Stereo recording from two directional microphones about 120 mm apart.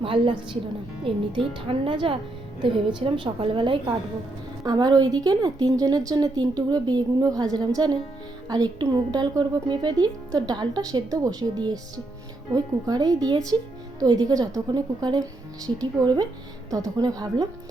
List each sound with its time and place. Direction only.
0.0 s a woman's voice: 45° right (ahead or behind)
4.6 s a woman's voice: 35° right (ahead or behind)